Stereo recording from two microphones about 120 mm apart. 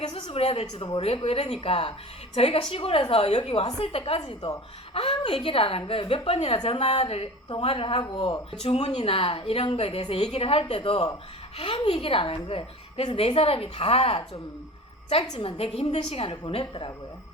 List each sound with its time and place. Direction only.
0.0 s a woman's voice: 55° left (ahead or behind)
8.6 s a woman's voice: 60° left (ahead or behind)